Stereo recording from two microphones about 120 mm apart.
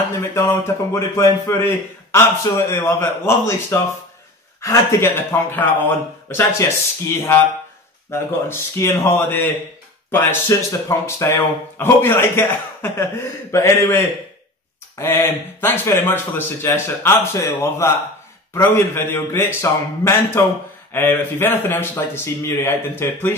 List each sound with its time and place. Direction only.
0.2 s speech: 20° left (ahead or behind)
8.1 s speech: 20° left (ahead or behind)